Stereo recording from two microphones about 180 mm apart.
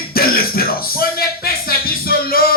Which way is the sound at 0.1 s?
55° left (ahead or behind).